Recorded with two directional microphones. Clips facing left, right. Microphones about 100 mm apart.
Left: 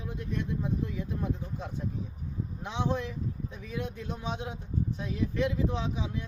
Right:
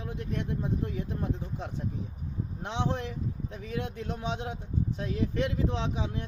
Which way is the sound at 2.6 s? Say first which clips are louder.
Even; 65° right (ahead or behind).